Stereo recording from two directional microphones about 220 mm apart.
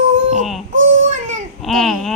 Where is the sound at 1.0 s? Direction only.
35° right (ahead or behind).